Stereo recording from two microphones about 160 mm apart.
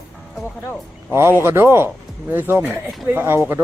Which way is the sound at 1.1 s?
15° right (ahead or behind).